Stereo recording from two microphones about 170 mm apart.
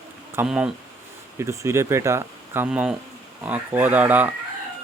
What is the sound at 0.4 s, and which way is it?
Speech, 5° right (ahead or behind).